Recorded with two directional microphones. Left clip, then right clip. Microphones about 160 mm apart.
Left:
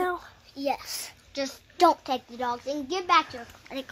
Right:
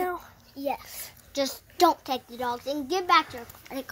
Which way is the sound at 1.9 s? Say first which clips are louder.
Left 1 dB; 5° left (ahead or behind).